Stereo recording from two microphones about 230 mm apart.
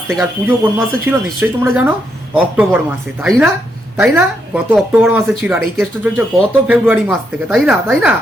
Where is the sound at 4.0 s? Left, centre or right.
Centre.